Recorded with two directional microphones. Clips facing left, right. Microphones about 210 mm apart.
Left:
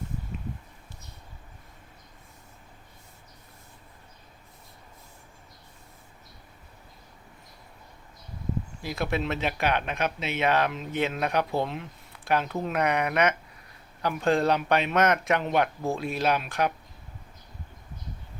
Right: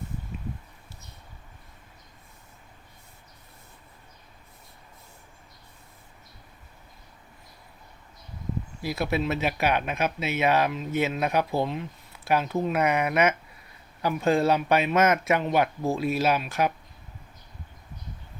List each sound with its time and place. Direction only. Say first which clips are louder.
8.8 s speech: right 3 dB; 5° right (ahead or behind)